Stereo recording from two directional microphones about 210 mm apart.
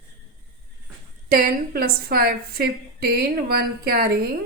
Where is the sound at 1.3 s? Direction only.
45° right (ahead or behind).